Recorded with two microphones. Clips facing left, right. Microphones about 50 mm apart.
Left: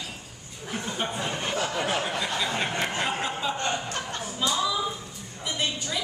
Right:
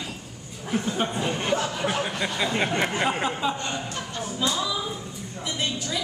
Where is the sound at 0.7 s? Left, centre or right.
Centre.